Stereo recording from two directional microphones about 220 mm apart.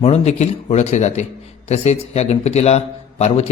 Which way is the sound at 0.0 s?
30° left (ahead or behind).